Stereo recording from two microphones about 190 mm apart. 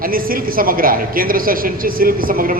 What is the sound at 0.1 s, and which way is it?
A man's voice, 50° right (ahead or behind).